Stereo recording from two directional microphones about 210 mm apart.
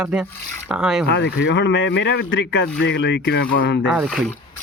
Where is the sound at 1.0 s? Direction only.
55° left (ahead or behind).